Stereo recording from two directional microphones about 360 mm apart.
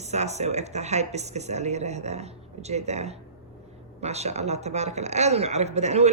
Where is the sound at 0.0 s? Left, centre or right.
Centre.